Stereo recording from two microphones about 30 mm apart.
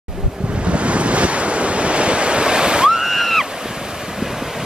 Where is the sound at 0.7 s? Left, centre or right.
Right.